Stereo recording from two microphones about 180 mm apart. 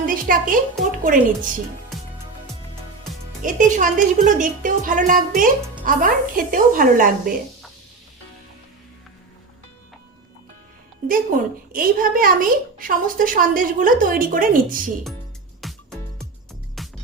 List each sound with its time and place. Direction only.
0.0 s a woman's voice: 50° right (ahead or behind)
3.4 s a woman's voice: 45° right (ahead or behind)
11.7 s a woman's voice: 50° right (ahead or behind)
15.6 s music: 5° left (ahead or behind)